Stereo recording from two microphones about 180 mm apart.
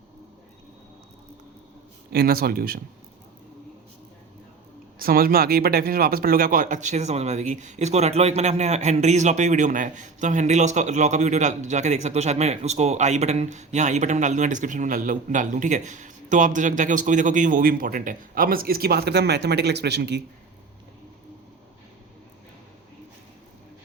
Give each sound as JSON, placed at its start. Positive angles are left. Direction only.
{"t": 2.1, "sound": "speech", "side_deg": -55}
{"t": 4.9, "sound": "speech", "side_deg": -55}